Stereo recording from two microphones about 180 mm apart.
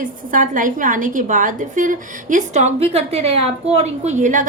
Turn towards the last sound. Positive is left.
turn(degrees=-45)  # may be behind; listen again after turning